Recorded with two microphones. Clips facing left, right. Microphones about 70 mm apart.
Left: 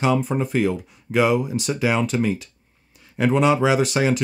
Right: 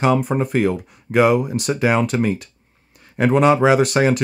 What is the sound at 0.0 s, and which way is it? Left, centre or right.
Speech, right.